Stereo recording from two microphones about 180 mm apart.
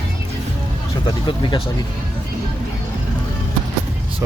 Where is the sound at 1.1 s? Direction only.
25° left (ahead or behind).